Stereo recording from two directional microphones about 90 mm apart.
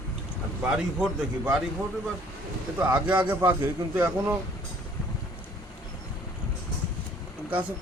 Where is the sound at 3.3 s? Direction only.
25° right (ahead or behind).